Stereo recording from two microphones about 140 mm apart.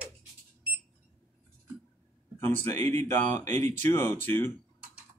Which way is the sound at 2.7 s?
15° left (ahead or behind).